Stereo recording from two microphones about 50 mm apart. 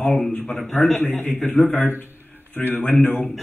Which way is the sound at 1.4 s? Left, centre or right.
Centre.